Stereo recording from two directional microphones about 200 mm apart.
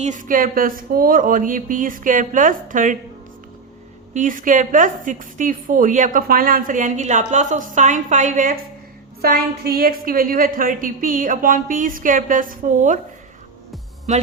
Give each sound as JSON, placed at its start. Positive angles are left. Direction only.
{"t": 0.0, "sound": "a woman's voice", "side_deg": -40}
{"t": 4.1, "sound": "a woman's voice", "side_deg": -40}
{"t": 14.1, "sound": "a woman's voice", "side_deg": -35}